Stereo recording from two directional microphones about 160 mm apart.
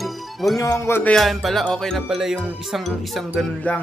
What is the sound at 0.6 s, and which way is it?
Speech, 20° left (ahead or behind).